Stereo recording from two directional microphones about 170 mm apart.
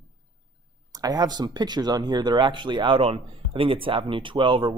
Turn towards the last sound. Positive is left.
turn(degrees=-30)  # may be behind; listen again after turning